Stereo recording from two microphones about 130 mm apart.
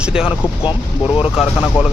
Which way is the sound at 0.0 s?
5° right (ahead or behind).